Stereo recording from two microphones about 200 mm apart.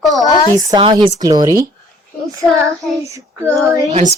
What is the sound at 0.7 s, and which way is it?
Speech, 20° right (ahead or behind).